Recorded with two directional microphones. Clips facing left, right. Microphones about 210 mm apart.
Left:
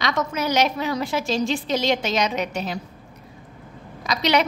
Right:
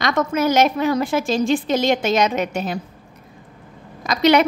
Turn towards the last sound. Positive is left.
turn(degrees=-50)  # may be behind; listen again after turning